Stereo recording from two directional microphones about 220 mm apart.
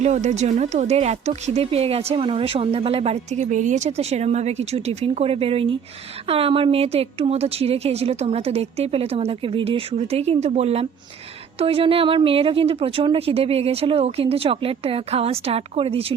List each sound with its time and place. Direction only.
0.0 s speech: 30° right (ahead or behind)